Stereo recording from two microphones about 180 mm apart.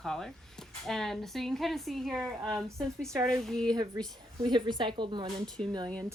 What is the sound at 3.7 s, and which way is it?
Speech, 20° right (ahead or behind).